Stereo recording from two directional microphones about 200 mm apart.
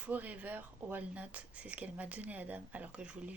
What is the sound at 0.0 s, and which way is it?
Speech, 10° right (ahead or behind).